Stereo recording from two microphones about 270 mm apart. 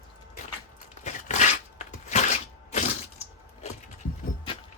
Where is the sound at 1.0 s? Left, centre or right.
Left.